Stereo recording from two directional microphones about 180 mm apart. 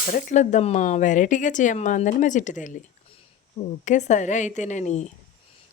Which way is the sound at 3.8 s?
40° left (ahead or behind).